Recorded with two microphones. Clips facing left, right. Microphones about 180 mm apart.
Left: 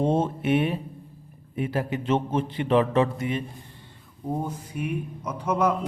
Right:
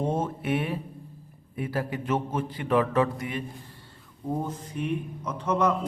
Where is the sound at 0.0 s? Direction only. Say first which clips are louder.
Left 5 dB; 30° left (ahead or behind).